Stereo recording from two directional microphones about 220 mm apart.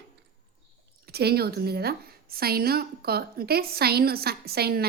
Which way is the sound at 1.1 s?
45° right (ahead or behind).